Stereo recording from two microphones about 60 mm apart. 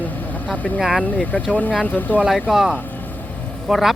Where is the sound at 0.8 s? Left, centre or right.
Centre.